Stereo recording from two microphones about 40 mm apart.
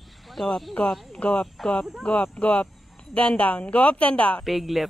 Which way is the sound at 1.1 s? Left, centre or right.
Left.